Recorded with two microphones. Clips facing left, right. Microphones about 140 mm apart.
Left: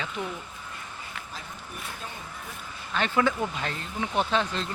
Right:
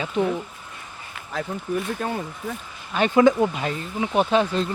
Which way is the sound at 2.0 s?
65° right (ahead or behind).